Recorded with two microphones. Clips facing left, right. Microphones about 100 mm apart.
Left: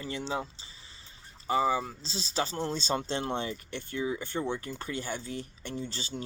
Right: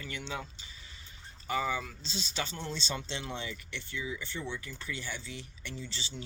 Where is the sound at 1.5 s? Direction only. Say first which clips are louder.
Left 6 dB; 30° left (ahead or behind).